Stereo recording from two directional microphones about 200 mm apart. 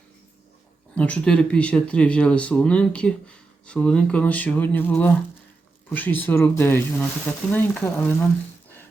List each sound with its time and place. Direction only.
0.9 s speech: 5° left (ahead or behind)